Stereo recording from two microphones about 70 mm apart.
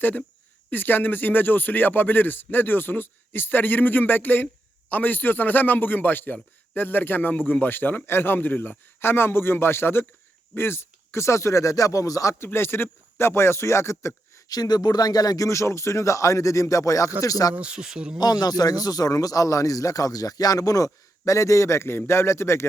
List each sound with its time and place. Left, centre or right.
0.7 s a man's voice: left
12.3 s speech: left
14.3 s speech: left
15.4 s speech: left
17.5 s speech: centre
18.2 s speech: left